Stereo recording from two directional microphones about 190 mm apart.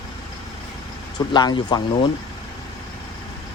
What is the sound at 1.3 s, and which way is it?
Speech, 25° left (ahead or behind).